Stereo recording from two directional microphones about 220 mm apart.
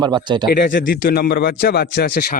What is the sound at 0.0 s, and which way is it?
Speech, 20° right (ahead or behind).